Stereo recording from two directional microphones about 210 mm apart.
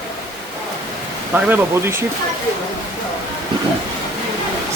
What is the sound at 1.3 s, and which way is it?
Speech, 5° right (ahead or behind).